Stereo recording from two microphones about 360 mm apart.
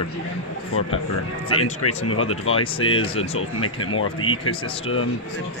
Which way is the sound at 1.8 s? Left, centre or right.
Left.